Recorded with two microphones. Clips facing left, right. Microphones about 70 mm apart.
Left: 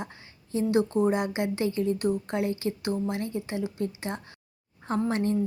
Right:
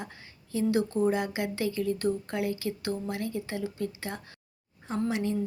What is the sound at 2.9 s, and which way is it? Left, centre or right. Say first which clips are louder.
A woman's voice: left 3 dB; centre.